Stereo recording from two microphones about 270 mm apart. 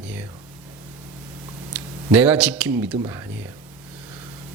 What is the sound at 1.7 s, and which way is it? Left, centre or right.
Speech, centre.